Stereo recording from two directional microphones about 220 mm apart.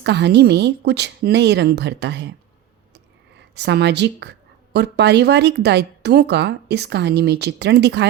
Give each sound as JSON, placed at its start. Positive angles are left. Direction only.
{"t": 0.0, "sound": "speech", "side_deg": -50}
{"t": 3.5, "sound": "speech", "side_deg": -50}